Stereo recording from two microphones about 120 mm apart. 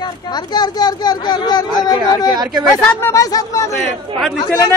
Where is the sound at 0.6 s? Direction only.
35° left (ahead or behind).